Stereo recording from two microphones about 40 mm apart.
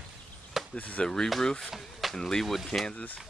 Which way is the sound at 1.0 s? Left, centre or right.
Centre.